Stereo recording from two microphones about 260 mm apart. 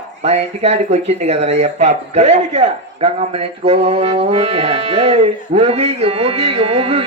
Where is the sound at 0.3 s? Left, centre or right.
Right.